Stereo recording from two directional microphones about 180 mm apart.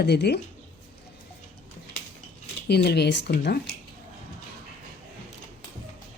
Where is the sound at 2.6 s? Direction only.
65° left (ahead or behind).